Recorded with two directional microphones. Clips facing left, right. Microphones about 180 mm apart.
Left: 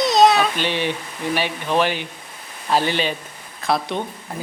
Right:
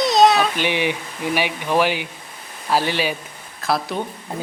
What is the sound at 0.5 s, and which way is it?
A child's voice, 15° right (ahead or behind).